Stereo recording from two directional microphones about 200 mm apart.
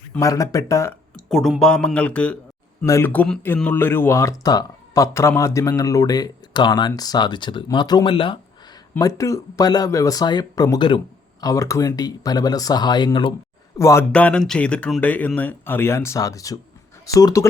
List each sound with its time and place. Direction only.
0.1 s speech: 15° left (ahead or behind)
1.1 s speech: centre (ahead or behind); by 17.4 s 20° left (ahead or behind)